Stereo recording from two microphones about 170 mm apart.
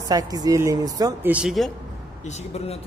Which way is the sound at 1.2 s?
5° right (ahead or behind).